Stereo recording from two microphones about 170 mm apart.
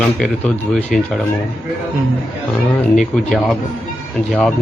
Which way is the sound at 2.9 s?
Centre (ahead or behind).